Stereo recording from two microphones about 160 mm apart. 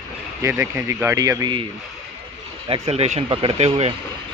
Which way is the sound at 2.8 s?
40° right (ahead or behind).